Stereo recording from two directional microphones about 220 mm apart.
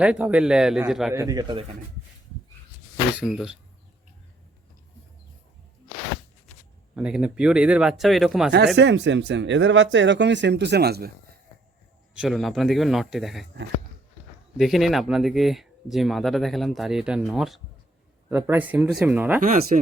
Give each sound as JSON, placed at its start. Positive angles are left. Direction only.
{"t": 0.0, "sound": "speech", "side_deg": -5}
{"t": 1.1, "sound": "speech", "side_deg": -15}
{"t": 3.2, "sound": "speech", "side_deg": -5}
{"t": 6.9, "sound": "speech", "side_deg": -5}
{"t": 8.5, "sound": "speech", "side_deg": -50}
{"t": 12.1, "sound": "speech", "side_deg": 0}
{"t": 14.6, "sound": "speech", "side_deg": 0}
{"t": 19.4, "sound": "speech", "side_deg": -35}